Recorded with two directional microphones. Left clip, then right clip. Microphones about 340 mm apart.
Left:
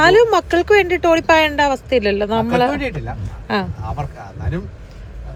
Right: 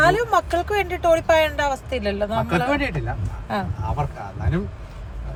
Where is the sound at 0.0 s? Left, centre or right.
Left.